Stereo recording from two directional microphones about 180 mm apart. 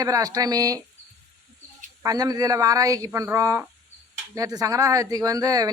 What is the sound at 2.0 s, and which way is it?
Speech, 20° right (ahead or behind).